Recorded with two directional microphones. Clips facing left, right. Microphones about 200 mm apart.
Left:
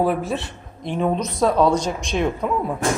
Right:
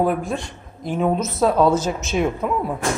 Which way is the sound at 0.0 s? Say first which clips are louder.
Even; centre (ahead or behind).